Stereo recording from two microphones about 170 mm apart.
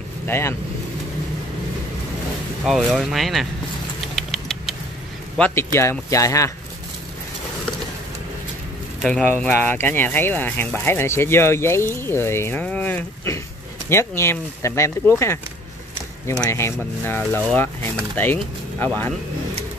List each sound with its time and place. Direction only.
0.3 s speech: 15° left (ahead or behind)
2.6 s speech: centre (ahead or behind)
4.1 s typing: centre (ahead or behind)
5.4 s speech: 15° left (ahead or behind)
9.2 s speech: 10° left (ahead or behind)
16.4 s speech: 15° left (ahead or behind)